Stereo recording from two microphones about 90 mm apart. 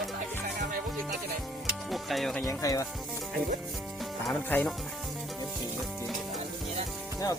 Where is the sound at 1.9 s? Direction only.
Centre (ahead or behind).